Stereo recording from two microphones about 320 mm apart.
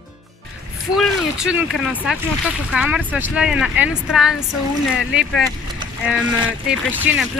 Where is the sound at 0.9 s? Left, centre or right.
Centre.